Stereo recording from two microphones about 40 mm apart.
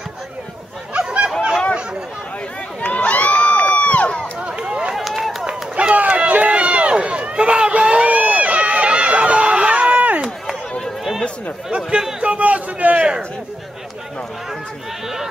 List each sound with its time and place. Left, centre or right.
0.9 s honk: right
2.8 s run: left
4.4 s run: right
4.9 s run: centre
5.5 s run: right
11.7 s a sound: centre
12.2 s a sound: right